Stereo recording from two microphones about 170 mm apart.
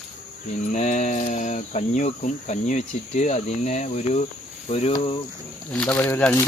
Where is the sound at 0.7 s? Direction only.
45° left (ahead or behind).